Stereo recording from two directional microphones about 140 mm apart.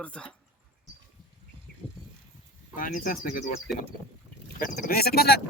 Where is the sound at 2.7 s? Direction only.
75° left (ahead or behind).